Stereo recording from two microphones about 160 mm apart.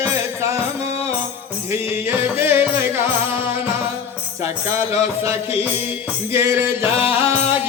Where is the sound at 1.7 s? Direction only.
15° right (ahead or behind).